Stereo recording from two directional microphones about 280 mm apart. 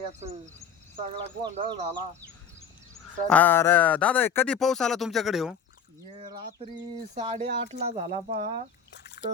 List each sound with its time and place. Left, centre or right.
0.1 s speech: right
3.2 s speech: centre
6.0 s speech: centre